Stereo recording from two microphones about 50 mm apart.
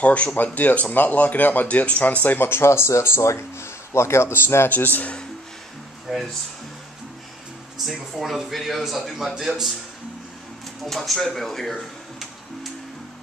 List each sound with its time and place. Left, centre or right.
0.0 s speech: left
2.2 s speech: left
3.2 s speech: left
4.6 s speech: left
6.1 s a man's voice: centre
7.8 s a man's voice: centre
10.8 s speech: centre